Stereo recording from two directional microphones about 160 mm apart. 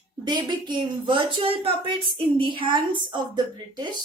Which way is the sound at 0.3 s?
25° right (ahead or behind).